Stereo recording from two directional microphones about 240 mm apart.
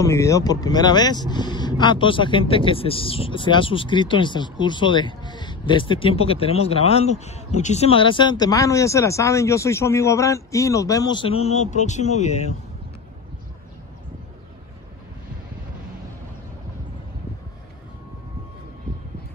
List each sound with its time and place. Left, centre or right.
0.0 s speech: centre; by 12.5 s left